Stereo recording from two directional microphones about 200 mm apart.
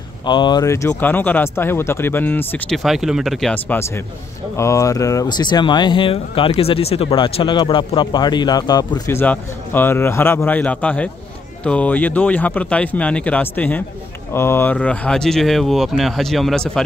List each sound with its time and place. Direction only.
0.2 s speech: 25° left (ahead or behind); by 16.8 s 5° left (ahead or behind)